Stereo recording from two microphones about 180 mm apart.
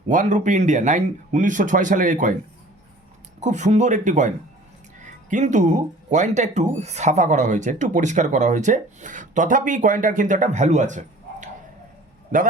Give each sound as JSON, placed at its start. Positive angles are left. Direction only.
{"t": 0.1, "sound": "speech", "side_deg": -45}
{"t": 3.4, "sound": "speech", "side_deg": -40}
{"t": 5.3, "sound": "speech", "side_deg": -45}